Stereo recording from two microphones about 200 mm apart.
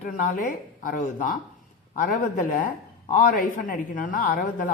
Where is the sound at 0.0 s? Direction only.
40° left (ahead or behind).